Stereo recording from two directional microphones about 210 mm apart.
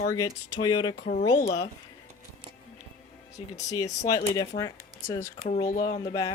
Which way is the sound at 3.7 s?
15° left (ahead or behind).